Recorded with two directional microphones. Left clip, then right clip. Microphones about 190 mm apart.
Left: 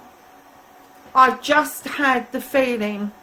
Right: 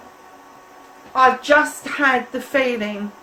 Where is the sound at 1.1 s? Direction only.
50° left (ahead or behind).